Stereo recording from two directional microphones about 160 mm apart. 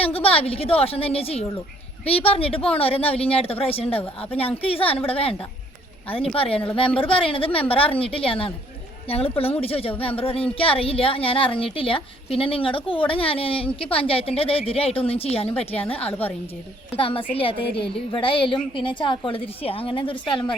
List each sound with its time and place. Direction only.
0.0 s a woman's voice: 35° left (ahead or behind)